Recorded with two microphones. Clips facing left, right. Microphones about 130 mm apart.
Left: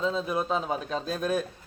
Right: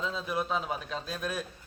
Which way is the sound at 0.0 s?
30° left (ahead or behind).